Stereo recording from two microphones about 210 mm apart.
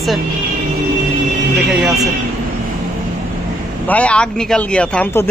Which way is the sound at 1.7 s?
Centre (ahead or behind).